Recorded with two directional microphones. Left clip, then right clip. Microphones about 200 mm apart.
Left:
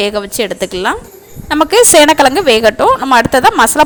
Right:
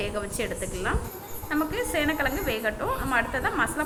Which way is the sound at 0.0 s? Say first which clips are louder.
Left 15 dB; 60° left (ahead or behind).